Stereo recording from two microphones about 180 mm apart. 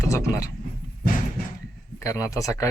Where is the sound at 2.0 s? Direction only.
15° left (ahead or behind).